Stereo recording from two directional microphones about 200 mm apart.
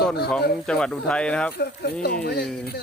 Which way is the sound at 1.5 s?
50° left (ahead or behind).